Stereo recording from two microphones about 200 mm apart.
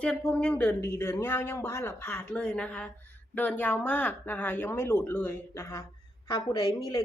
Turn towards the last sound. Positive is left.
turn(degrees=15)  # may be behind; listen again after turning